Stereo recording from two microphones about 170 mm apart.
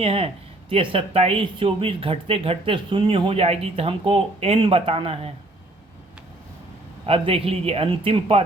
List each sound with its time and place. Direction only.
0.0 s speech: 35° right (ahead or behind)
7.0 s speech: 35° right (ahead or behind)